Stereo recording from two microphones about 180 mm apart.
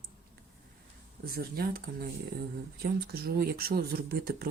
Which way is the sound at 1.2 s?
55° right (ahead or behind).